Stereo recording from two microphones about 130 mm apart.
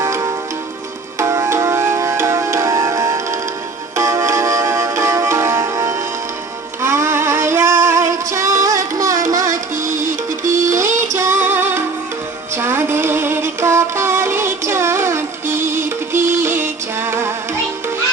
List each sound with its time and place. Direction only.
0.0 s tick-tock: 20° right (ahead or behind)
1.2 s music: 20° right (ahead or behind)
9.8 s music: 85° right
10.8 s music: 20° right (ahead or behind)